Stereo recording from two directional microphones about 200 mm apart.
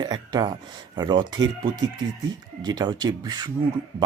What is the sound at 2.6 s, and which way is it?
Speech, 20° right (ahead or behind).